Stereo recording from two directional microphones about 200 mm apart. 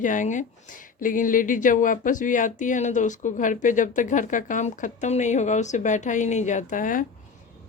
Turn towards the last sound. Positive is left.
turn(degrees=40)  # may be behind; listen again after turning